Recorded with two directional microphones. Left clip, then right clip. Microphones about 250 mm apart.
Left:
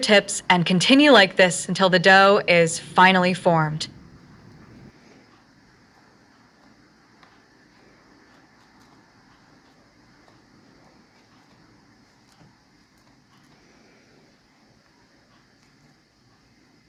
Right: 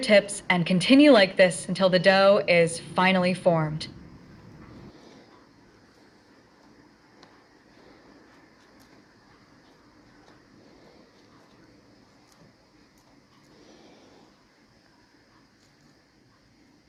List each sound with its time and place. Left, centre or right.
0.0 s a woman's voice: left